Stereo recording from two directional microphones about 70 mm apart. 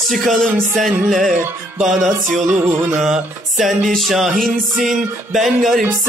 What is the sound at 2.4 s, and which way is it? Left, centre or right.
Music, right.